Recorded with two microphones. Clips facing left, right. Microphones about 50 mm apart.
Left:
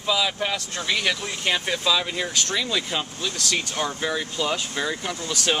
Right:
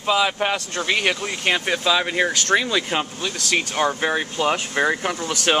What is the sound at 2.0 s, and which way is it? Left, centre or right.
Speech, right.